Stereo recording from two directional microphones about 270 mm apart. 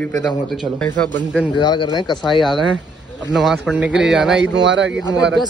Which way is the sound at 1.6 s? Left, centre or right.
Centre.